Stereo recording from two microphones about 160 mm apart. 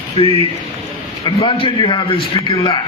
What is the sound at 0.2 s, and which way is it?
A man's voice, 35° left (ahead or behind).